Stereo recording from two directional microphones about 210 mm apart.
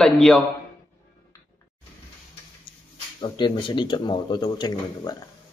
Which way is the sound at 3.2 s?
20° left (ahead or behind).